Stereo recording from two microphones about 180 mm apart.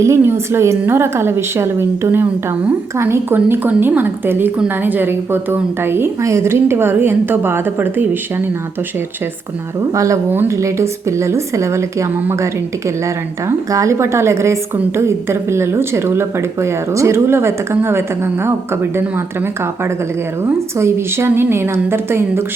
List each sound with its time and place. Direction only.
0.0 s a woman's voice: 15° right (ahead or behind)
9.9 s a woman's voice: 15° right (ahead or behind)
13.5 s a woman's voice: 15° right (ahead or behind)